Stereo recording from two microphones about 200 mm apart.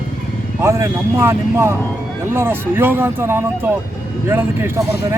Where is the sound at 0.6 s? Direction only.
15° right (ahead or behind).